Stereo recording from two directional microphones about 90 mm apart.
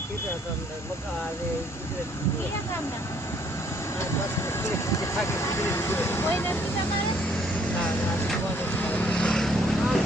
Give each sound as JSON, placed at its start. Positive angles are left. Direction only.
{"t": 4.6, "sound": "speech", "side_deg": 30}
{"t": 8.7, "sound": "vehicle", "side_deg": 20}